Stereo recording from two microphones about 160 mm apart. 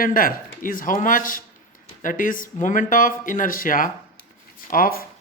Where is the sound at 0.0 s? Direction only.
60° left (ahead or behind).